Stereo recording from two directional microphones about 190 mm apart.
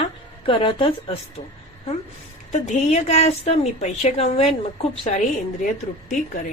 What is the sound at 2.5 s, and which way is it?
Speech, 35° left (ahead or behind).